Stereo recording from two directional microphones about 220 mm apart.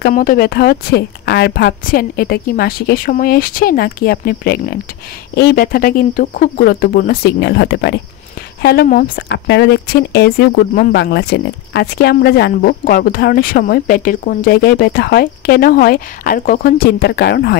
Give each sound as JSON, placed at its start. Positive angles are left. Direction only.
{"t": 0.0, "sound": "speech", "side_deg": 40}